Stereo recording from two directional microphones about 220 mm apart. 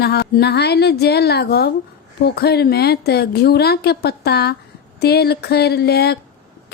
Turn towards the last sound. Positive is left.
turn(degrees=45)  # may be behind; listen again after turning